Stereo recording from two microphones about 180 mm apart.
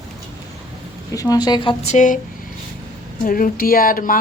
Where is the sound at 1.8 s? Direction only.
40° left (ahead or behind).